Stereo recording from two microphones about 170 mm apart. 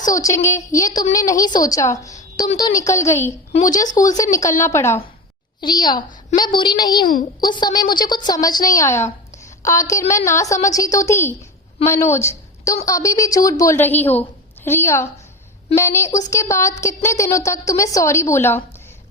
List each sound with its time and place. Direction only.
0.0 s a woman's voice: 20° left (ahead or behind)
2.1 s a sound: 25° left (ahead or behind)
2.6 s a woman's voice: 20° left (ahead or behind)
11.8 s a woman's voice: 35° left (ahead or behind)
12.6 s a woman's voice: 20° left (ahead or behind)